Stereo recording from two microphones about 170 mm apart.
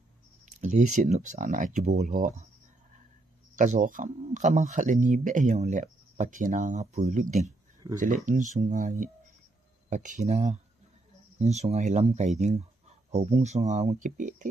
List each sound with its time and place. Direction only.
0.5 s speech: 45° right (ahead or behind)
3.5 s speech: 45° right (ahead or behind)